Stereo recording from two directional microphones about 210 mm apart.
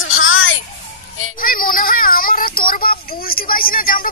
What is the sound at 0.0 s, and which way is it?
Music, 70° left (ahead or behind).